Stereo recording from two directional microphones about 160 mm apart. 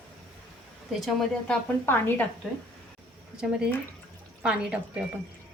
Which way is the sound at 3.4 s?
5° right (ahead or behind).